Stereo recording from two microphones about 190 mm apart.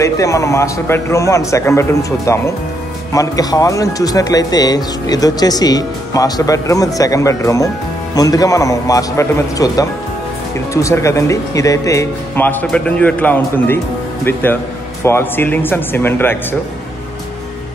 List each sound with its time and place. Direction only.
0.0 s speech: 15° left (ahead or behind)